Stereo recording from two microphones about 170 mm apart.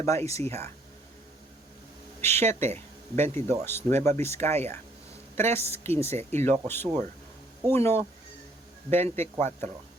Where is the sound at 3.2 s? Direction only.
40° right (ahead or behind).